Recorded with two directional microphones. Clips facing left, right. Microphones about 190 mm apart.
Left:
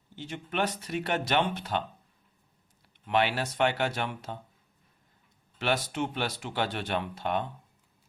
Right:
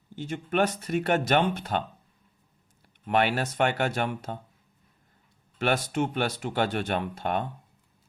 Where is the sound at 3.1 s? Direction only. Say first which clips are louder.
Right 2 dB; 50° right (ahead or behind).